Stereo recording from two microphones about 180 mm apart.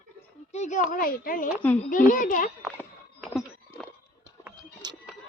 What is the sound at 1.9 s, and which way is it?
Speech, 45° left (ahead or behind).